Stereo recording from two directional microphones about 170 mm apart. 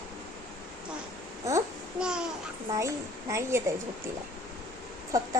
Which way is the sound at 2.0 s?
5° right (ahead or behind).